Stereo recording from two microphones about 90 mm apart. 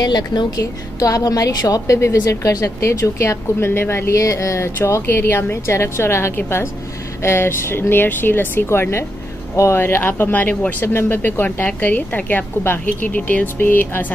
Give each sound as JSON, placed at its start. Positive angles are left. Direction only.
{"t": 0.0, "sound": "a woman's voice", "side_deg": 50}